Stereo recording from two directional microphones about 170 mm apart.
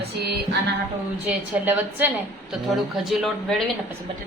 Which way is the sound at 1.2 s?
10° right (ahead or behind).